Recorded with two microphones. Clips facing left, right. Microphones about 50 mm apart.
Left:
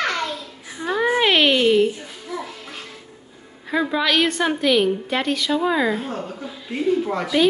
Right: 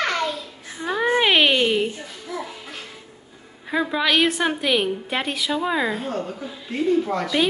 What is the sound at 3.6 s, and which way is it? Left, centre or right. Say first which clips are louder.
A woman's voice: left 1 dB; centre.